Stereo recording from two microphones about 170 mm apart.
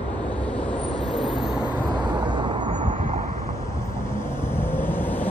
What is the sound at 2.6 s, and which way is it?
Vehicle, 40° right (ahead or behind).